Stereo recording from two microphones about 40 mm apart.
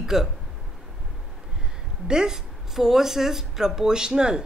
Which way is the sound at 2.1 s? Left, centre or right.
Centre.